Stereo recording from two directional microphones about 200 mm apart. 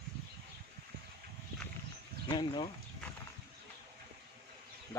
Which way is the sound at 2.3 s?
25° left (ahead or behind).